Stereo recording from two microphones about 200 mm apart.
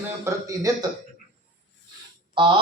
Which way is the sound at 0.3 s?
15° right (ahead or behind).